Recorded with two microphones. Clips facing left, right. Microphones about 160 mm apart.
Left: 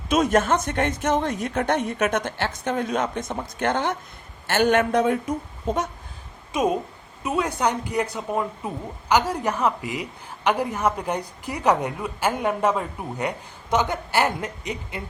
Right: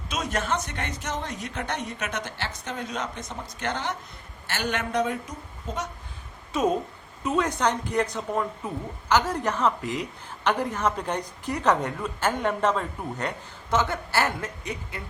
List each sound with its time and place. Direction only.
0.1 s a woman's voice: 50° left (ahead or behind)
6.5 s a woman's voice: 10° left (ahead or behind)